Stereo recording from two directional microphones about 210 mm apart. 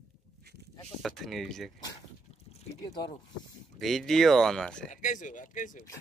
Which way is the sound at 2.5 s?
30° left (ahead or behind).